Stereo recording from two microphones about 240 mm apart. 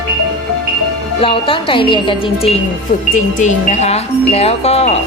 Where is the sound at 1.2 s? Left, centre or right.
Left.